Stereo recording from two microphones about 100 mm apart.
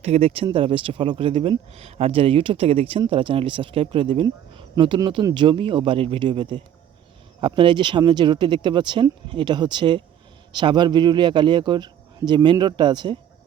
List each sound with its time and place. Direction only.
0.0 s speech: 90° right
0.5 s speech: 60° right (ahead or behind)
3.1 s speech: 65° right (ahead or behind)
4.8 s a man's voice: 50° right (ahead or behind)